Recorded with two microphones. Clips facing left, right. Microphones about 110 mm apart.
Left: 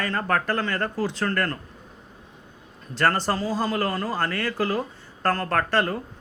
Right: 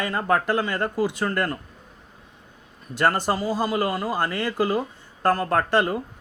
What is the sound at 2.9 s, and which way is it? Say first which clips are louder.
Speech: right 1 dB; 15° right (ahead or behind).